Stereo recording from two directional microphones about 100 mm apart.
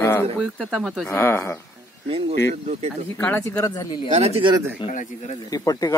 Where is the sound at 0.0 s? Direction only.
25° left (ahead or behind).